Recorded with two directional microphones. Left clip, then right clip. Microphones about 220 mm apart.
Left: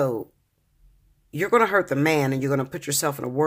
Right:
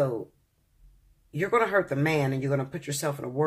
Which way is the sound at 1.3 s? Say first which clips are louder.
Left 4 dB; 50° left (ahead or behind).